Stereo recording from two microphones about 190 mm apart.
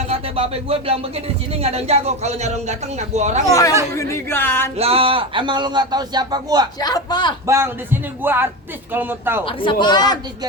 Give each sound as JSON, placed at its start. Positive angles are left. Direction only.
{"t": 0.1, "sound": "speech", "side_deg": -30}
{"t": 3.9, "sound": "speech", "side_deg": 15}
{"t": 4.8, "sound": "a man's voice", "side_deg": -30}
{"t": 6.7, "sound": "a man's voice", "side_deg": 20}
{"t": 7.4, "sound": "speech", "side_deg": -15}
{"t": 9.4, "sound": "a man's voice", "side_deg": 25}